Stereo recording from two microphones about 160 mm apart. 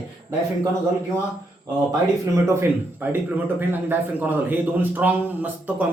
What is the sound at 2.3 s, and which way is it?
Speech, 15° right (ahead or behind).